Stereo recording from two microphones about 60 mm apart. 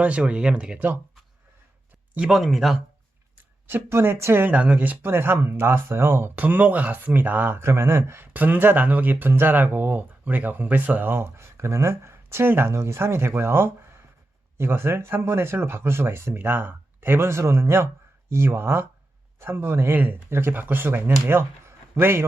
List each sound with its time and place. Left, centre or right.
0.0 s speech: right
2.3 s speech: centre
3.3 s a sound: right
3.8 s speech: right
4.4 s speech: right
5.1 s speech: right
6.3 s speech: right
7.7 s speech: right
8.3 s speech: right